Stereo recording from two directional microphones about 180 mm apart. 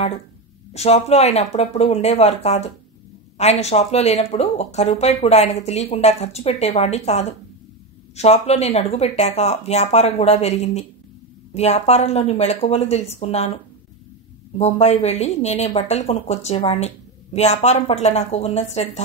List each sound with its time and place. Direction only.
0.7 s a woman's voice: 35° left (ahead or behind)
14.6 s a woman's voice: 35° left (ahead or behind)